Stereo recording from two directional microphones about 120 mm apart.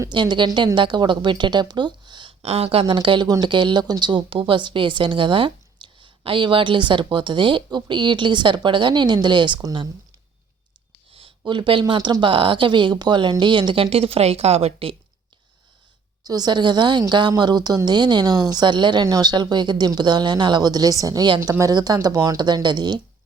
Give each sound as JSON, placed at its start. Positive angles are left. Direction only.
{"t": 0.1, "sound": "a woman's voice", "side_deg": -40}
{"t": 2.4, "sound": "a woman's voice", "side_deg": -55}
{"t": 11.1, "sound": "a woman's voice", "side_deg": -45}
{"t": 16.2, "sound": "a woman's voice", "side_deg": -35}